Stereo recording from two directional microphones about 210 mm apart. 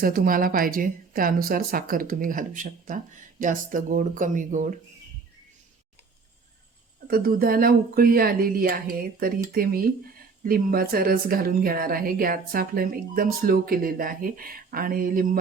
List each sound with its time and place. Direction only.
0.0 s a woman's voice: 40° right (ahead or behind)
7.1 s speech: 45° right (ahead or behind)